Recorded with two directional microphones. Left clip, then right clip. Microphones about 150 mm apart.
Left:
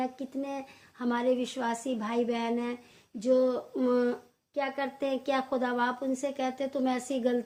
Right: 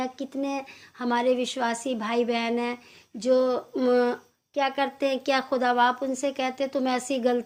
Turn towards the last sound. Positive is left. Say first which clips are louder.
# right 5 dB
turn(degrees=-30)  # may be behind; listen again after turning